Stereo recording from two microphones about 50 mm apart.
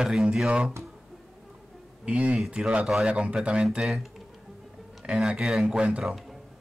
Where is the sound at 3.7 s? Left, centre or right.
Centre.